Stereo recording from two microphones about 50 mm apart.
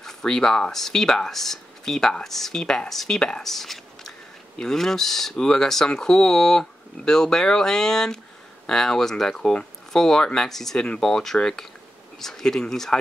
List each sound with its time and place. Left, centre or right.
0.0 s speech: centre
3.4 s a sound: centre
4.6 s speech: centre